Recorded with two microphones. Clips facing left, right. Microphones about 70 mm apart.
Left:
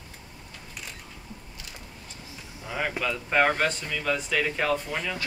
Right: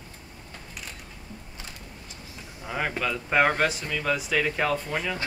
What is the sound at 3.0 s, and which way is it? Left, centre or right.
Speech, centre.